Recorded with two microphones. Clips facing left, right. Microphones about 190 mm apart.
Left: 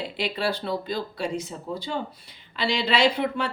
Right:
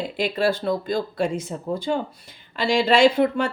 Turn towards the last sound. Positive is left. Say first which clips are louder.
# right 6 dB
turn(degrees=-45)  # may be behind; listen again after turning